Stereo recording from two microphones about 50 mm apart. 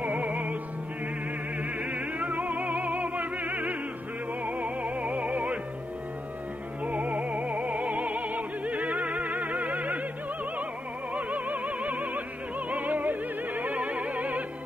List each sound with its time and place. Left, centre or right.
0.0 s music: right
1.6 s music: right
6.8 s music: right
11.1 s music: right